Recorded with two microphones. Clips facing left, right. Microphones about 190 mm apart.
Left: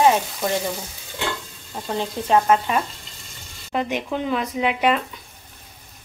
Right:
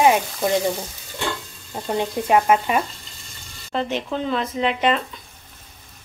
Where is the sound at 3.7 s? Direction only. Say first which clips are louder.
Even; 10° left (ahead or behind).